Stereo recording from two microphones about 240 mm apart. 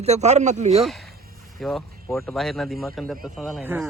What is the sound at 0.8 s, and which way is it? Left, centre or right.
Speech, centre.